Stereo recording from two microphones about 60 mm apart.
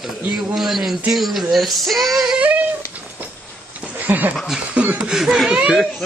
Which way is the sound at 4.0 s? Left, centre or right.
Right.